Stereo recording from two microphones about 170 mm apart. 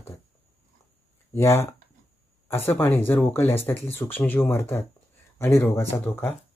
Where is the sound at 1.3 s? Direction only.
15° left (ahead or behind).